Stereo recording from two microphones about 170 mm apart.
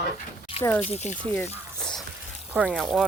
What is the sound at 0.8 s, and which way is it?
Speech, 40° left (ahead or behind).